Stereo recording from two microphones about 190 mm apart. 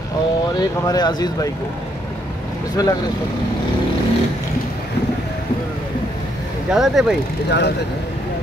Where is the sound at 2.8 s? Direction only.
20° left (ahead or behind).